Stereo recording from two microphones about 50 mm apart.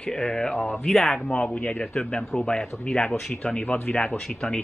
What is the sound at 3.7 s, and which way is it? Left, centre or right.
Speech, left.